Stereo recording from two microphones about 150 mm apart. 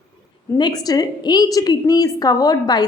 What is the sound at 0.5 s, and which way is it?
A woman's voice, 25° left (ahead or behind).